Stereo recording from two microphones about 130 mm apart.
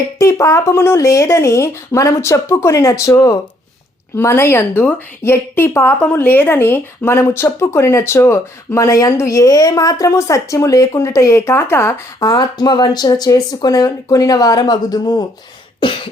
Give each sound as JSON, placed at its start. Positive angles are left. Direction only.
{"t": 0.2, "sound": "a woman's voice", "side_deg": 25}